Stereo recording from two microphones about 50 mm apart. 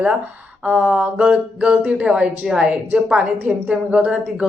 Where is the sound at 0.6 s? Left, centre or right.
Right.